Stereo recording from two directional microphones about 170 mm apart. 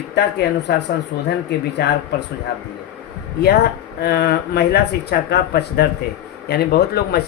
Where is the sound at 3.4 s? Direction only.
75° left (ahead or behind).